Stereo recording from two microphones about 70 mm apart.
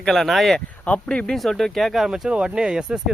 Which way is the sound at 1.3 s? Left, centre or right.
Centre.